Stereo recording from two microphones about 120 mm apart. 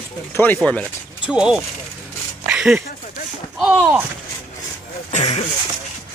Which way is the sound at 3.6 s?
10° right (ahead or behind).